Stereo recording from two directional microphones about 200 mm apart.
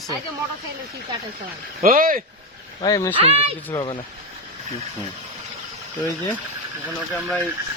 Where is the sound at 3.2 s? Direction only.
30° right (ahead or behind).